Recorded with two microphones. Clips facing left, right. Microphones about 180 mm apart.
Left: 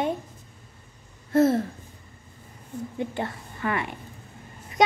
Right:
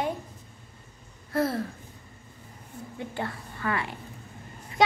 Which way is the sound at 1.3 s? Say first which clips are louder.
Left 7 dB; 25° left (ahead or behind).